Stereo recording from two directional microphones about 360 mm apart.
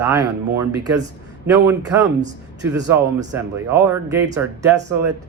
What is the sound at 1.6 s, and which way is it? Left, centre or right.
Speech, centre.